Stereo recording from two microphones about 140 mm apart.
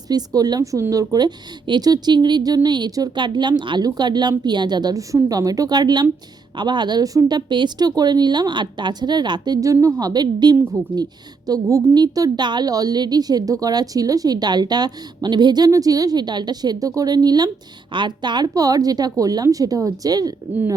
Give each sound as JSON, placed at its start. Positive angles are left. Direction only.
{"t": 0.1, "sound": "a woman's voice", "side_deg": -30}